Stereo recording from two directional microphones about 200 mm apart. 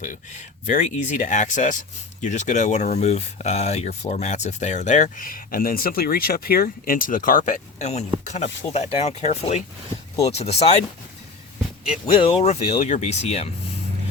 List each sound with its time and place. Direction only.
0.0 s speech: 40° left (ahead or behind)
12.2 s speech: 30° left (ahead or behind)